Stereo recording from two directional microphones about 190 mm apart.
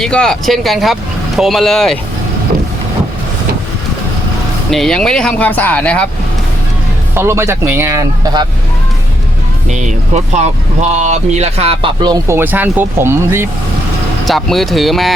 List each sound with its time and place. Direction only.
0.0 s speech: 5° left (ahead or behind)
4.7 s speech: centre (ahead or behind)
7.1 s speech: 15° right (ahead or behind)
9.6 s speech: 35° right (ahead or behind); by 13.5 s 10° right (ahead or behind)
14.3 s speech: centre (ahead or behind)